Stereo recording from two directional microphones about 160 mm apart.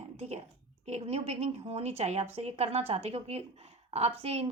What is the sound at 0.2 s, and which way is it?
A woman's voice, 40° right (ahead or behind).